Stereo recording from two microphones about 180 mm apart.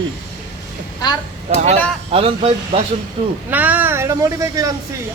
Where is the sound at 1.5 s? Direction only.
40° right (ahead or behind).